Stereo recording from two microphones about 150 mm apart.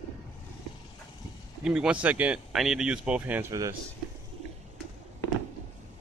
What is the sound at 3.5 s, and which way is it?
Speech, 20° right (ahead or behind).